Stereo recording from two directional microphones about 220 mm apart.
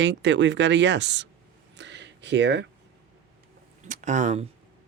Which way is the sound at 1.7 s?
55° right (ahead or behind).